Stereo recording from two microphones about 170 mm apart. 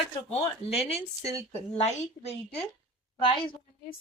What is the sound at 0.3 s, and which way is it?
Speech, 35° left (ahead or behind).